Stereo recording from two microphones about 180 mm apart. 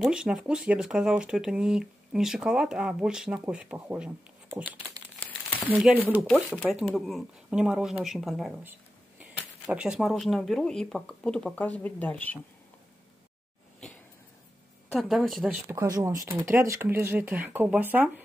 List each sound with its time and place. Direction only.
0.0 s speech: 5° right (ahead or behind)
14.9 s speech: centre (ahead or behind)
15.7 s speech: 20° right (ahead or behind)